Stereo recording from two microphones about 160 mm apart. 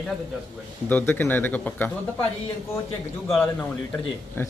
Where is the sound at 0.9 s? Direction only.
10° left (ahead or behind).